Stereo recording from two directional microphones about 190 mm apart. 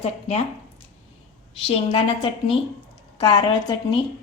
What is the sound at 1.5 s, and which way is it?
A woman's voice, 30° left (ahead or behind).